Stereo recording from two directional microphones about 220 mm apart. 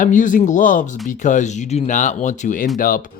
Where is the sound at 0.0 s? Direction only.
35° left (ahead or behind).